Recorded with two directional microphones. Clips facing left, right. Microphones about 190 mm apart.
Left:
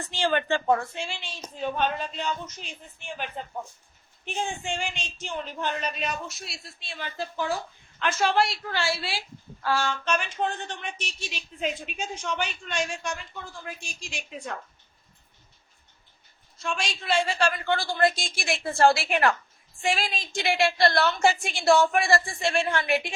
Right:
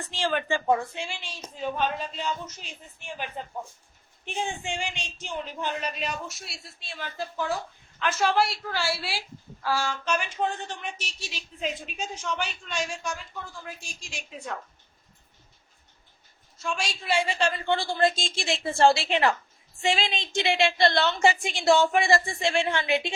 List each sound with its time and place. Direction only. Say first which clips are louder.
0.1 s a man's voice: left 2 dB; centre (ahead or behind)
3.4 s a man's voice: even; 10° right (ahead or behind)
16.6 s a woman's voice: even; 10° right (ahead or behind)